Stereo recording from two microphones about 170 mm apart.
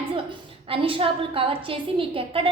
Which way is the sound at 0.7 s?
30° right (ahead or behind).